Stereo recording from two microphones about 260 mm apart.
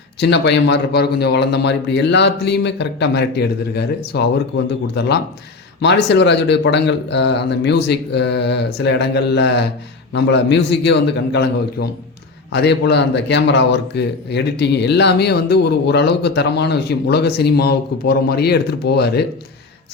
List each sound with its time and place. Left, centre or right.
0.2 s a man's voice: left